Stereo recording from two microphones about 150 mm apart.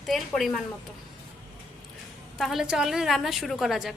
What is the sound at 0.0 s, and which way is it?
Speech, centre (ahead or behind).